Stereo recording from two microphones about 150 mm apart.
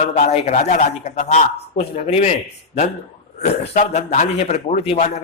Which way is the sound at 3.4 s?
45° left (ahead or behind).